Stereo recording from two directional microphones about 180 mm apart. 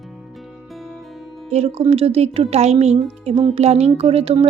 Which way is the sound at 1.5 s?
35° right (ahead or behind).